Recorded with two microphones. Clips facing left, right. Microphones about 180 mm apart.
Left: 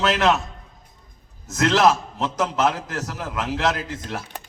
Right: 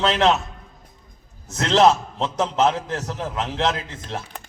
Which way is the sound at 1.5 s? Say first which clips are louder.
Right 1 dB; 30° right (ahead or behind).